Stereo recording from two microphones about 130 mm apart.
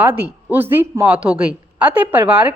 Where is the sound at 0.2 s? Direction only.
15° right (ahead or behind).